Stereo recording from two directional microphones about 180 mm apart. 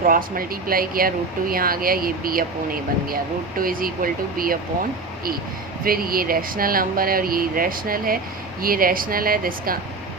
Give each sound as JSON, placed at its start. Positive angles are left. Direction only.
{"t": 0.0, "sound": "speech", "side_deg": -50}
{"t": 3.6, "sound": "speech", "side_deg": -50}
{"t": 5.8, "sound": "speech", "side_deg": -55}